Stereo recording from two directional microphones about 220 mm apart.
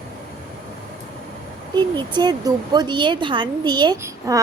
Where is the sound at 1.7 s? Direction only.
20° right (ahead or behind).